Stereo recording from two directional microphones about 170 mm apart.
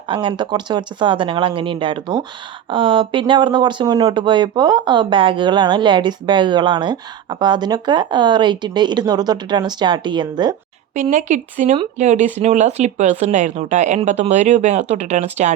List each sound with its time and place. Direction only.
0.1 s speech: 30° right (ahead or behind)
10.9 s speech: 45° right (ahead or behind)